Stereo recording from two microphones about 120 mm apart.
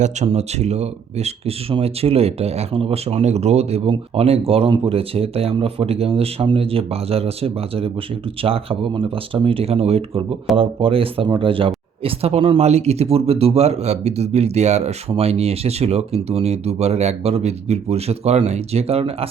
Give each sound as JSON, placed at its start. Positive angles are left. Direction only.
{"t": 0.3, "sound": "speech", "side_deg": -65}